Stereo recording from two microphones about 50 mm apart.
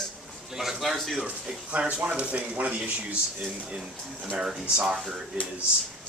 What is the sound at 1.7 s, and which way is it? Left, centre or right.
Speech, right.